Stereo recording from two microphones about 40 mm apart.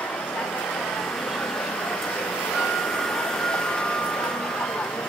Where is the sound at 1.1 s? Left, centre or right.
Centre.